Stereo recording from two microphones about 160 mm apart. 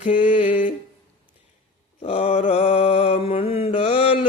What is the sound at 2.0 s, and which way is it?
Mantra, 40° left (ahead or behind).